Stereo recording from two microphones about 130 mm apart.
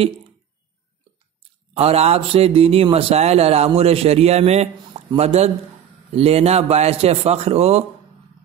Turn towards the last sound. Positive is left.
turn(degrees=-55)  # may be behind; listen again after turning